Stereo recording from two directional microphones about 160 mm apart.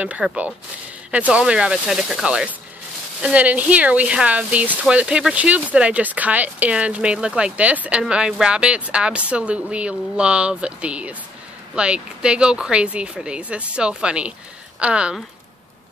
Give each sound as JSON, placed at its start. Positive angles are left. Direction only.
{"t": 0.0, "sound": "speech", "side_deg": -5}